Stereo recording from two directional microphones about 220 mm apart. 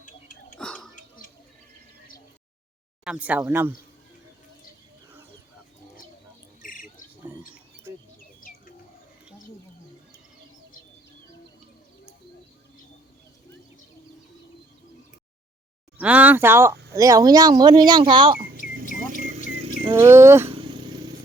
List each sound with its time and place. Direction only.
0.5 s whispering: 5° left (ahead or behind)
3.0 s speech: 5° right (ahead or behind)
6.6 s cricket: 40° left (ahead or behind)
7.3 s bird: 5° right (ahead or behind)
8.4 s bird: 40° left (ahead or behind)
16.0 s a sound: 5° right (ahead or behind)
16.9 s speech: 15° right (ahead or behind)
18.6 s a sound: 45° right (ahead or behind); by 20.0 s 25° right (ahead or behind)
20.0 s speech: 10° right (ahead or behind)
20.5 s vehicle: 20° right (ahead or behind)